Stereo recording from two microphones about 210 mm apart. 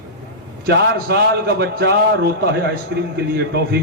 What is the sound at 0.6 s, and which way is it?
A man's voice, 50° right (ahead or behind).